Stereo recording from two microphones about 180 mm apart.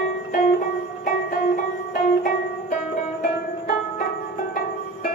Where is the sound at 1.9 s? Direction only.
45° left (ahead or behind).